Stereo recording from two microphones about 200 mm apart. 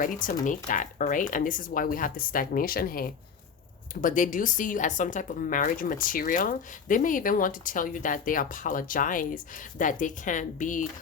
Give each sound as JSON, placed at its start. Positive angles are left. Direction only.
{"t": 0.0, "sound": "speech", "side_deg": 40}